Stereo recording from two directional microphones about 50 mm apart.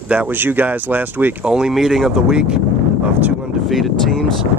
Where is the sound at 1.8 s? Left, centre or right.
Centre.